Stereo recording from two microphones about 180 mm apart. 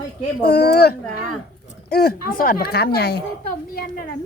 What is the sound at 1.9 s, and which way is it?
Speech, 60° left (ahead or behind).